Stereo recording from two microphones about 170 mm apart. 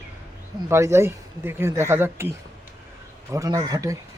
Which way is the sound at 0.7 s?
15° right (ahead or behind).